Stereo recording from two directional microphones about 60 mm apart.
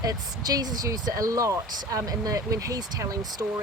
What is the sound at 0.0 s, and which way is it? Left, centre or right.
Speech, right.